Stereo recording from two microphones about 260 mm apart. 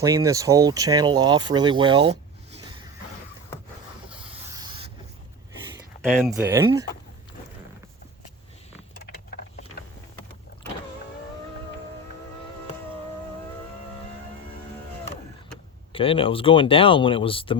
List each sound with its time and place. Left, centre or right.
0.0 s speech: centre
4.4 s rub: centre
6.3 s speech: centre
15.9 s speech: left